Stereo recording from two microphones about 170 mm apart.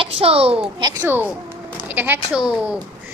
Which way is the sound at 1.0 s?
10° right (ahead or behind).